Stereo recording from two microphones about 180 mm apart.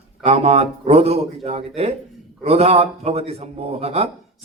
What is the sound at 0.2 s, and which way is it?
A man's voice, 35° right (ahead or behind).